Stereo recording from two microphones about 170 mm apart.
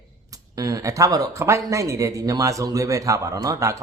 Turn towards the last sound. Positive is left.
turn(degrees=-20)  # may be behind; listen again after turning